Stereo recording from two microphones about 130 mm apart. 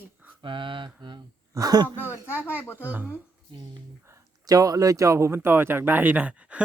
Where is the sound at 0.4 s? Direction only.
40° right (ahead or behind).